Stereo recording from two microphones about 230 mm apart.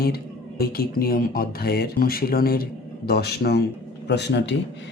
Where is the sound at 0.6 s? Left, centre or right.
Left.